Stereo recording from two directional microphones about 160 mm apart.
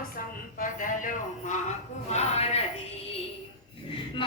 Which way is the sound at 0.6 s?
55° left (ahead or behind).